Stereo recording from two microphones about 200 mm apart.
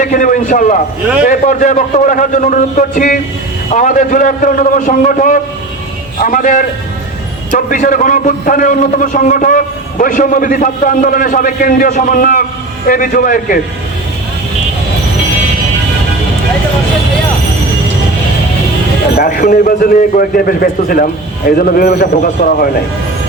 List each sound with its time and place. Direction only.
0.0 s a man's voice: 40° left (ahead or behind)
19.1 s a man's voice: 45° left (ahead or behind)